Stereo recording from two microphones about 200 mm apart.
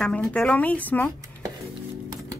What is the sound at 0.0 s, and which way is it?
A woman's voice, 5° left (ahead or behind).